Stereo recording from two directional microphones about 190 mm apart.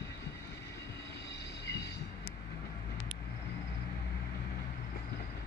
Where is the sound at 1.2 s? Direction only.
60° left (ahead or behind).